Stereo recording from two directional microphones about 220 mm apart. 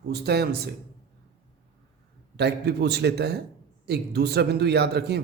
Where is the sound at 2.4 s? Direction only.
50° right (ahead or behind).